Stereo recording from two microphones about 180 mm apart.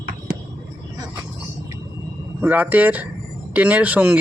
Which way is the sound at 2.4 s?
10° right (ahead or behind).